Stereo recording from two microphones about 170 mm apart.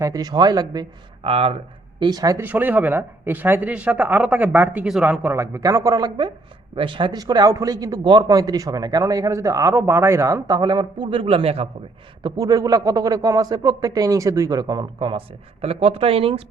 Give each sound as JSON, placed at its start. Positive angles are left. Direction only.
{"t": 0.0, "sound": "a man's voice", "side_deg": -20}
{"t": 2.0, "sound": "a man's voice", "side_deg": -25}
{"t": 2.5, "sound": "a man's voice", "side_deg": -10}
{"t": 12.2, "sound": "a man's voice", "side_deg": -20}